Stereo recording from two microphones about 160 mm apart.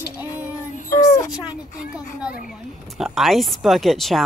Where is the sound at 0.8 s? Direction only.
20° left (ahead or behind).